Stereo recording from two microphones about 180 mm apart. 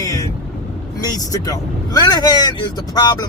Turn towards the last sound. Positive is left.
turn(degrees=20)  # may be behind; listen again after turning